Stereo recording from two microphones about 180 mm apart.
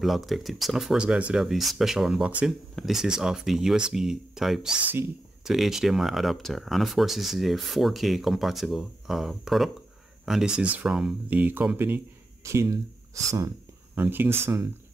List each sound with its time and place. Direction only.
0.0 s speech: centre (ahead or behind)